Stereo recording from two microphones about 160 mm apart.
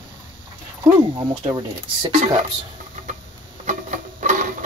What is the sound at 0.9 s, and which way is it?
Speech, 20° right (ahead or behind).